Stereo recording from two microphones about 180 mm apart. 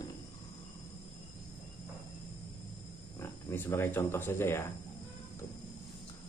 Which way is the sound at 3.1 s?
10° left (ahead or behind).